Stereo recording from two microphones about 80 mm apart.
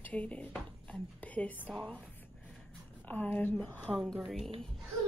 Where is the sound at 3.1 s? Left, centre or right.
Left; by 4.6 s centre.